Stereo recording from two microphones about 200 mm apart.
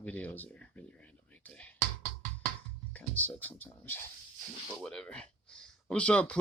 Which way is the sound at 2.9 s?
10° left (ahead or behind).